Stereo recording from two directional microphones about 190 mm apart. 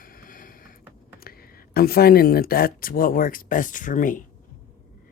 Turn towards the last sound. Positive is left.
turn(degrees=45)  # may be behind; listen again after turning